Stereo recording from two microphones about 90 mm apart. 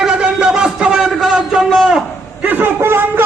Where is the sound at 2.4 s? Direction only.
20° right (ahead or behind).